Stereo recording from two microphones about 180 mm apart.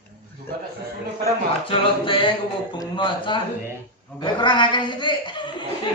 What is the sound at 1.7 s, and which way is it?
Speech, 30° left (ahead or behind).